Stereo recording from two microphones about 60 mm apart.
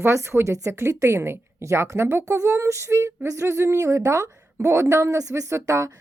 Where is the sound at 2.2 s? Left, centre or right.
Right.